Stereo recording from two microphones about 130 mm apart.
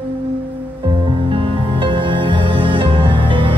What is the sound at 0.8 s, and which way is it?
Music, 40° right (ahead or behind).